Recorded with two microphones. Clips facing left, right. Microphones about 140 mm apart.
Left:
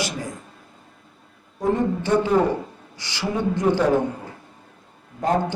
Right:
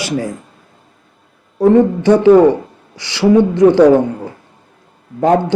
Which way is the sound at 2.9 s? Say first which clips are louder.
Right 15 dB; 75° right (ahead or behind).